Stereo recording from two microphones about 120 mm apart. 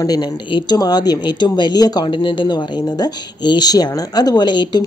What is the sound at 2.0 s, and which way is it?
Speech, 45° left (ahead or behind).